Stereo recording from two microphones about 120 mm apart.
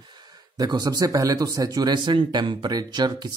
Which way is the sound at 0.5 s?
35° right (ahead or behind).